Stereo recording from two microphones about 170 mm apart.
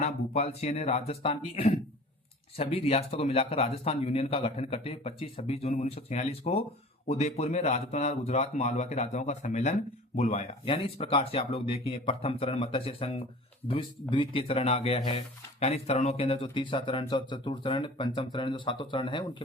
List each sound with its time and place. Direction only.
0.0 s a man's voice: 40° left (ahead or behind)